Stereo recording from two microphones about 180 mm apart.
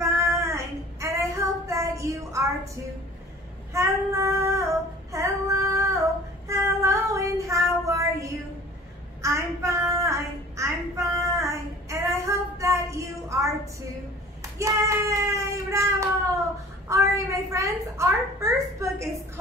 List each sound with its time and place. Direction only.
0.0 s child singing: 15° right (ahead or behind)
5.1 s female singing: 15° right (ahead or behind)
6.4 s child singing: 15° right (ahead or behind)
16.9 s a woman's voice: 15° right (ahead or behind)